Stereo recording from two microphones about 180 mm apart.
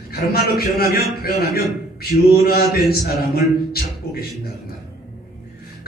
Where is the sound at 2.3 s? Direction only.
60° left (ahead or behind).